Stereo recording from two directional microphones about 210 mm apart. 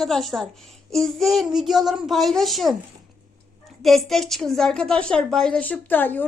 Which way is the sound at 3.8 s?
Centre (ahead or behind).